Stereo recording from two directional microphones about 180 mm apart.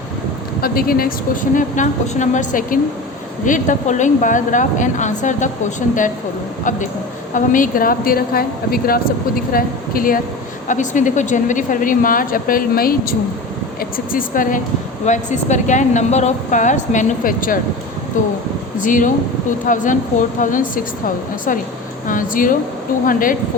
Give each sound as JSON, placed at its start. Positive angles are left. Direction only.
{"t": 0.6, "sound": "speech", "side_deg": 55}
{"t": 1.5, "sound": "a woman's voice", "side_deg": 45}
{"t": 7.3, "sound": "a woman's voice", "side_deg": 50}
{"t": 22.0, "sound": "a woman's voice", "side_deg": 50}